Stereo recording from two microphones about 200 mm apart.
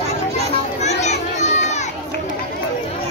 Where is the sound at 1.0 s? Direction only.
35° left (ahead or behind).